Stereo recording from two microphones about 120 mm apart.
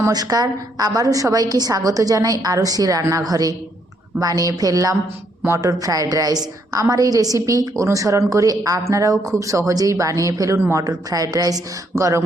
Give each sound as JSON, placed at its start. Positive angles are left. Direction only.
{"t": 0.0, "sound": "a woman's voice", "side_deg": -30}